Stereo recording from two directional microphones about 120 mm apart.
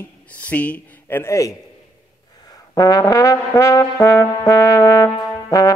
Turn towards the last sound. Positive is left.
turn(degrees=30)  # may be behind; listen again after turning